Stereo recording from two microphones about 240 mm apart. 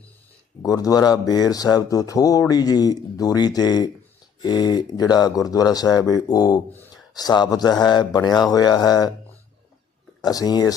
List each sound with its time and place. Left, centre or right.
0.6 s speech: centre
10.2 s speech: centre